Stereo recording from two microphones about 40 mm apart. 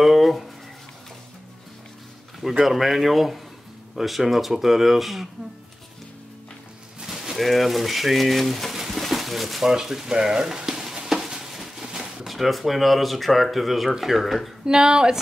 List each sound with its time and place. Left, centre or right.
0.0 s a sound: centre
2.6 s speech: centre
7.1 s pigeon: centre
9.7 s speech: centre
11.1 s a sound: centre
12.3 s speech: centre
14.7 s speech: centre